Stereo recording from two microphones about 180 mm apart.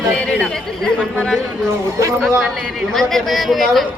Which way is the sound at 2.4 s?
Centre (ahead or behind).